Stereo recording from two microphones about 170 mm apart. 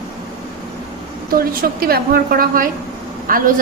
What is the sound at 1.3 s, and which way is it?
A woman's voice, 60° right (ahead or behind).